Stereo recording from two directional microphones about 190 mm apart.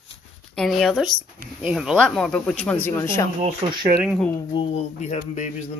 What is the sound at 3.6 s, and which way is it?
Speech, 30° right (ahead or behind).